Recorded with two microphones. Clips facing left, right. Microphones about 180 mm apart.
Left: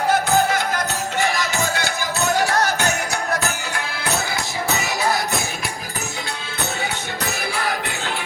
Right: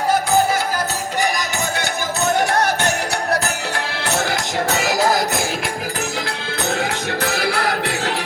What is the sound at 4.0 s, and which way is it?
Music, 90° right.